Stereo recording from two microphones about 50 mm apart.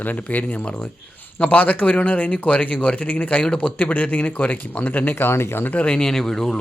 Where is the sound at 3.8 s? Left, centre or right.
Left.